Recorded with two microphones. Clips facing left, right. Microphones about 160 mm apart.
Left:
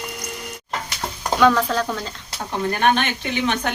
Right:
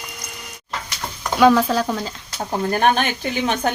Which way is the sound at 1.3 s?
10° right (ahead or behind).